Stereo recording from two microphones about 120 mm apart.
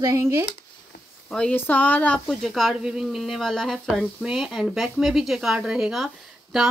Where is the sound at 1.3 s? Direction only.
10° left (ahead or behind).